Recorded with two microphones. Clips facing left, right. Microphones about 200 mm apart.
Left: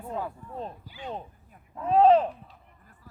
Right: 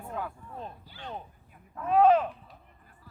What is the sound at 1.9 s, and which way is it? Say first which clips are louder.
Speech: left 2 dB; 30° left (ahead or behind).